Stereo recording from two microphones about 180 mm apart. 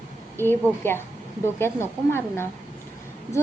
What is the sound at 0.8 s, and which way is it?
A woman's voice, 10° left (ahead or behind).